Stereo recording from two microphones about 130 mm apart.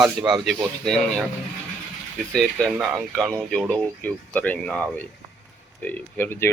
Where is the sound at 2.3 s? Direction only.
Centre (ahead or behind); by 6.5 s 20° left (ahead or behind).